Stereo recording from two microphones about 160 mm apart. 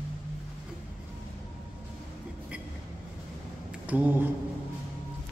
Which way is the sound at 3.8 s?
10° right (ahead or behind).